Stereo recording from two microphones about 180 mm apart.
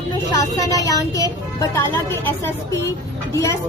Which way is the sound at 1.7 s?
15° left (ahead or behind).